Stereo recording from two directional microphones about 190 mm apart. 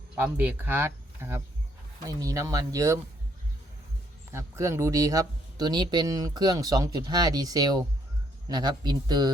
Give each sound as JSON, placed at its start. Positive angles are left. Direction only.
{"t": 0.2, "sound": "speech", "side_deg": -10}
{"t": 4.3, "sound": "speech", "side_deg": -15}